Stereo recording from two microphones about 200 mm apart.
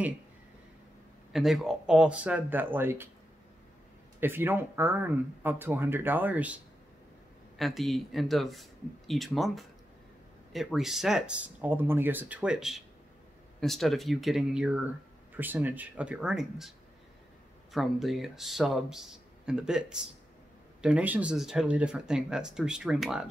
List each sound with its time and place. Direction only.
1.3 s speech: centre (ahead or behind)
4.2 s speech: 10° right (ahead or behind)
17.7 s speech: centre (ahead or behind)